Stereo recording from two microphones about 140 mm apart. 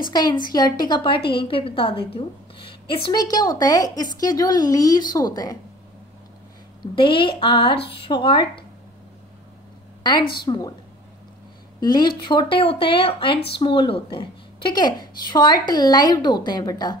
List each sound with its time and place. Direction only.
0.0 s a woman's voice: 30° left (ahead or behind)
6.8 s speech: 35° left (ahead or behind)
10.3 s speech: 30° left (ahead or behind)
11.8 s speech: 30° left (ahead or behind)